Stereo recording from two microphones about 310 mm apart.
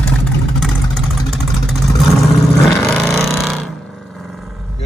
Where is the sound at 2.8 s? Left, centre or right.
Centre.